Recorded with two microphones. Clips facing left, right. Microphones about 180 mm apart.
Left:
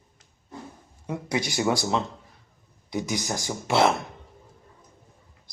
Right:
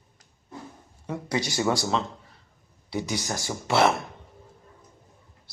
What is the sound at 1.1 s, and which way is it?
Speech, 15° left (ahead or behind).